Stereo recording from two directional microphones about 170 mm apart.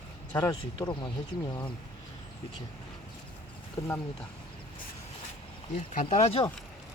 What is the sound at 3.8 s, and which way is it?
Speech, 20° left (ahead or behind).